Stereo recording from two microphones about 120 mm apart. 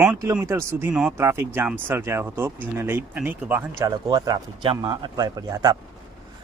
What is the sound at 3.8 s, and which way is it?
Speech, 30° right (ahead or behind).